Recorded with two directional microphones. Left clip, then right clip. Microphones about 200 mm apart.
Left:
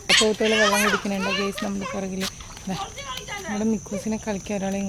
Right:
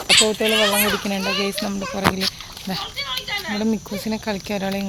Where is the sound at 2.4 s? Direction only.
20° right (ahead or behind).